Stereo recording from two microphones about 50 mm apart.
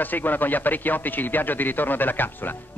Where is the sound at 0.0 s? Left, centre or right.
Left.